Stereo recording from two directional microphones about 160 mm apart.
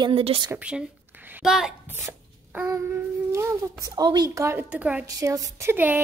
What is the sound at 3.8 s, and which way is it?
A woman's voice, 25° right (ahead or behind).